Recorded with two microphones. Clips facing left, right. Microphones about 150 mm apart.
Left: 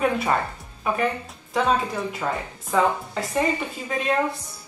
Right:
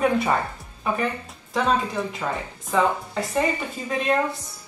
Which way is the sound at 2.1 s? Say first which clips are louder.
Left 1 dB; 5° left (ahead or behind).